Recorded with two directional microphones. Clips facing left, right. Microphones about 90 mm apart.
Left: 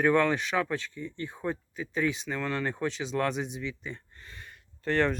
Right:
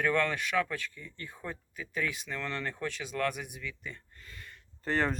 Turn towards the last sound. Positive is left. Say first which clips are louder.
# left 4 dB
turn(degrees=-5)  # may be behind; listen again after turning